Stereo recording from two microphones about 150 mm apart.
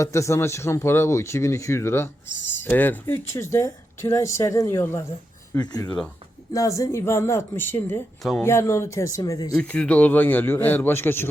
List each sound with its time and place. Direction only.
0.0 s speech: 20° left (ahead or behind)
9.6 s speech: 10° left (ahead or behind)